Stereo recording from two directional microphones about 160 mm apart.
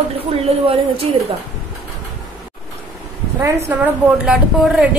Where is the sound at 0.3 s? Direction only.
35° right (ahead or behind).